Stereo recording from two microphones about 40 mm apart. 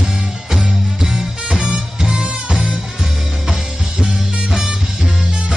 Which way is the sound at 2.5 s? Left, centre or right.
Centre.